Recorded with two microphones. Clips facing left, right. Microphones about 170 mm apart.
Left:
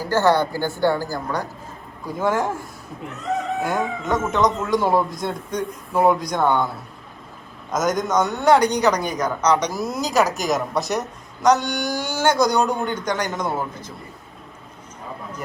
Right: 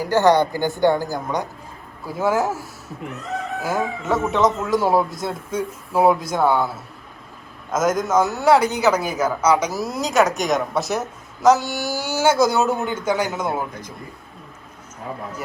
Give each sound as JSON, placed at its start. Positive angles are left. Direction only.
{"t": 0.0, "sound": "a woman's voice", "side_deg": -15}
{"t": 7.7, "sound": "a man's voice", "side_deg": 0}